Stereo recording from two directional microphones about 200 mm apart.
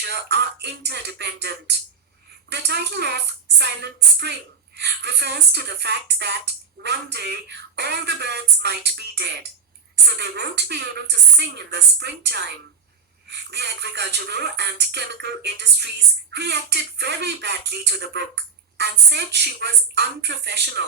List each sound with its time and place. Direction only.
0.0 s speech: 55° right (ahead or behind)